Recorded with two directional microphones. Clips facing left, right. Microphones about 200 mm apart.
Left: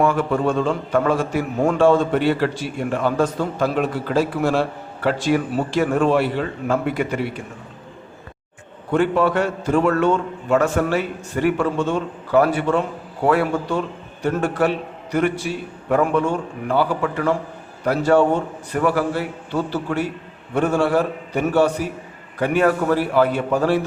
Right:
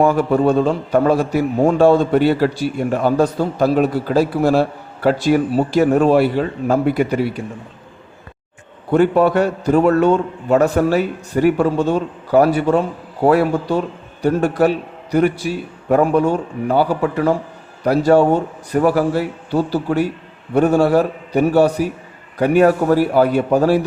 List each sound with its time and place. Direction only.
0.0 s a man's voice: 40° right (ahead or behind)
8.9 s a man's voice: 40° right (ahead or behind)